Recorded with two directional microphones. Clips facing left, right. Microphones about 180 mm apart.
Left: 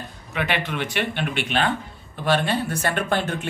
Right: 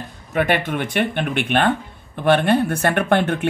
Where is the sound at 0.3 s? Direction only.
50° right (ahead or behind).